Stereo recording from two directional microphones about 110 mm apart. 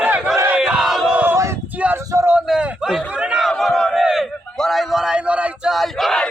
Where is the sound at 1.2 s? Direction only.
25° right (ahead or behind).